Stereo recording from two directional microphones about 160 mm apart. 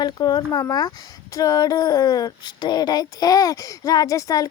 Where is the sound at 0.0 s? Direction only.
25° left (ahead or behind).